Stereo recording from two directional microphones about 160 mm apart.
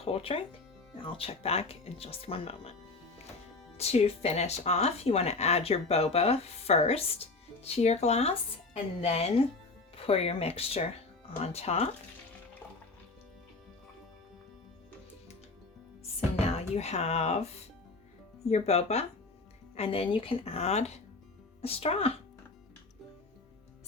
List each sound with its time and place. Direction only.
0.0 s speech: 40° left (ahead or behind)
3.8 s speech: 40° left (ahead or behind)
16.5 s speech: 40° left (ahead or behind)
18.4 s speech: 40° left (ahead or behind)